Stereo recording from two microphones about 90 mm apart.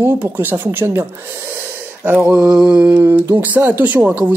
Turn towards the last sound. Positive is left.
turn(degrees=-20)  # may be behind; listen again after turning